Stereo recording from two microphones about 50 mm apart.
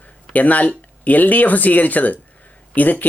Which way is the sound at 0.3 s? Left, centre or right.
Left.